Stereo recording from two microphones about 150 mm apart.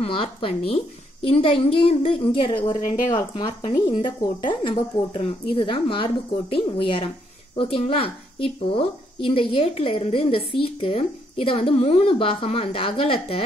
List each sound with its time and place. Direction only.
0.0 s a woman's voice: 35° left (ahead or behind)